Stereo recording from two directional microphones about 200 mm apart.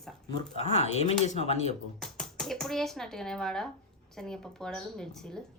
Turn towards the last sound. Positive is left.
turn(degrees=5)  # may be behind; listen again after turning